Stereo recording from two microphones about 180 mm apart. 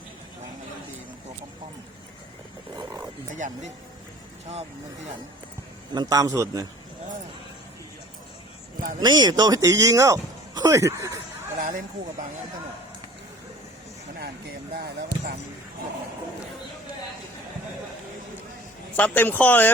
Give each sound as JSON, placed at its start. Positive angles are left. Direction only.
{"t": 3.3, "sound": "speech", "side_deg": -45}
{"t": 5.9, "sound": "speech", "side_deg": -20}
{"t": 9.0, "sound": "speech", "side_deg": -25}
{"t": 11.6, "sound": "speech", "side_deg": -45}
{"t": 14.8, "sound": "speech", "side_deg": -60}
{"t": 18.9, "sound": "speech", "side_deg": 10}